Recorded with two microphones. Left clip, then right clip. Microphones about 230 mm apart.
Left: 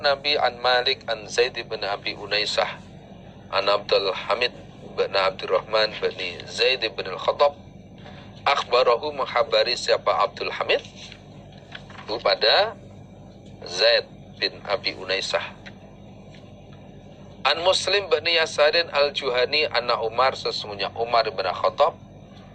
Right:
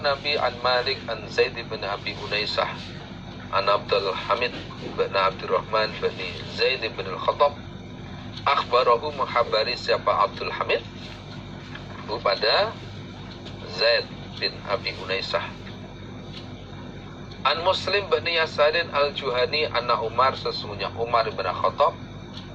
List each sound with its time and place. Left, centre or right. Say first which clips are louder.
0.0 s a man's voice: left 2 dB; left
12.0 s a man's voice: left 2 dB; left
13.7 s a man's voice: left 2 dB; left
17.4 s a man's voice: left 2 dB; left